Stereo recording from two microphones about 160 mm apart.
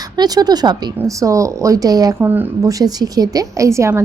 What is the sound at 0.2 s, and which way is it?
A woman's voice, 25° right (ahead or behind).